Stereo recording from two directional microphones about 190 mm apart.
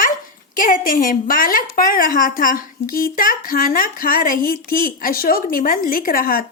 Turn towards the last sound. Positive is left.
turn(degrees=50)  # may be behind; listen again after turning